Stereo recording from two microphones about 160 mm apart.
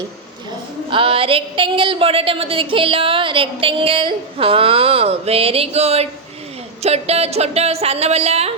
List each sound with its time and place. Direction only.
0.9 s a woman's voice: 35° right (ahead or behind)